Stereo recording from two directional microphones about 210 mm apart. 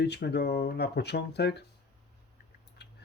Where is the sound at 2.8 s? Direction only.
55° left (ahead or behind).